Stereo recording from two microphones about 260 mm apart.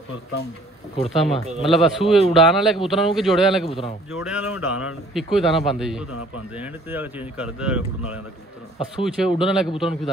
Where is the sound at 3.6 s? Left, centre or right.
Left.